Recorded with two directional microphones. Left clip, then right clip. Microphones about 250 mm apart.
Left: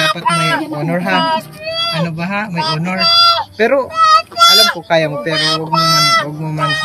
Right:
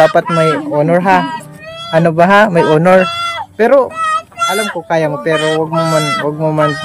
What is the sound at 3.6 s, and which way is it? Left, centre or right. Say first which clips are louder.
Speech: right 3 dB; centre.